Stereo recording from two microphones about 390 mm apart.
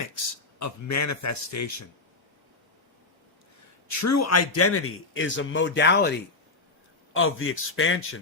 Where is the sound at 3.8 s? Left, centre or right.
Left.